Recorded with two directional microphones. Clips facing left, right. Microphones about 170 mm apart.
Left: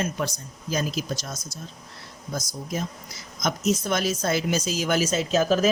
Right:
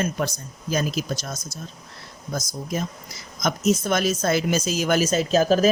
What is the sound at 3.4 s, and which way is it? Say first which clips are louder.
Speech: right 3 dB; 55° right (ahead or behind).